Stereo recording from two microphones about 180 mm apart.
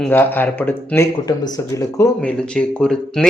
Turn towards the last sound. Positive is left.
turn(degrees=5)  # may be behind; listen again after turning